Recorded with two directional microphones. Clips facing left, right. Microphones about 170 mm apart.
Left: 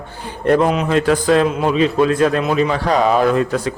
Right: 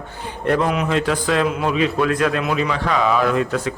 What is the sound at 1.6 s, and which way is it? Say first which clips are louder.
A man's voice: left 4 dB; 30° left (ahead or behind).